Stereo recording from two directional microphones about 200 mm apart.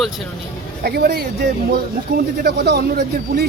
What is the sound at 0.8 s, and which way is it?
A man's voice, 55° right (ahead or behind).